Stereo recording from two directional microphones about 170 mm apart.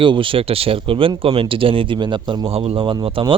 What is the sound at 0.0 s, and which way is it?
A man's voice, 30° right (ahead or behind).